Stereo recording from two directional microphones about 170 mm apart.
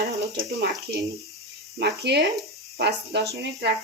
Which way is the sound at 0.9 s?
85° right.